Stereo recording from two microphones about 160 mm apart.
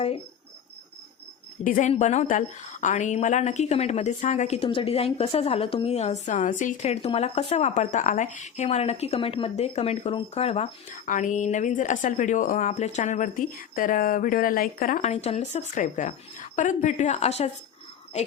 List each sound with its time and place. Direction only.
1.6 s speech: 60° left (ahead or behind)
1.9 s speech: 45° left (ahead or behind)
6.2 s speech: 50° left (ahead or behind)
11.0 s speech: 50° left (ahead or behind)